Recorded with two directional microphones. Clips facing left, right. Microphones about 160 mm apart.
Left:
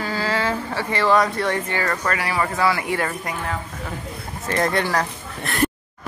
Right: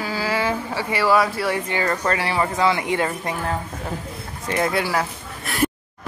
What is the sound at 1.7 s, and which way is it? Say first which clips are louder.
Speech: right 2 dB; 20° right (ahead or behind).